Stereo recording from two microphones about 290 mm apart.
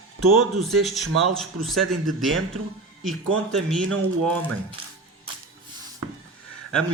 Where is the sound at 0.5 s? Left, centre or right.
Centre.